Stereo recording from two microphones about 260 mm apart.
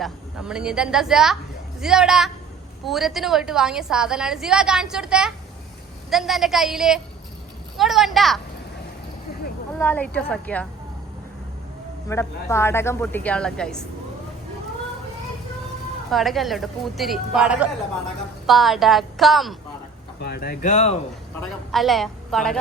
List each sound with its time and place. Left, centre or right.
0.0 s a woman's voice: centre
9.7 s a woman's voice: centre
12.0 s speech: centre
16.0 s a woman's voice: centre
20.1 s speech: left
21.7 s a woman's voice: centre